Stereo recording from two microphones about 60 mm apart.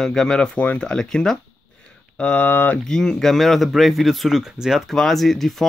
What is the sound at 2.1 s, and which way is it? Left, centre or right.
Speech, left.